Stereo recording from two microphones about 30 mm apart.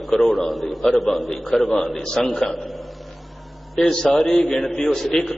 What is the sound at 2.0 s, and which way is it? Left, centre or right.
Speech, left.